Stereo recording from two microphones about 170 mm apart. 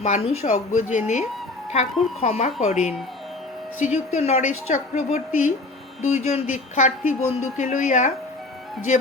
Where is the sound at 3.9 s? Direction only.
40° left (ahead or behind).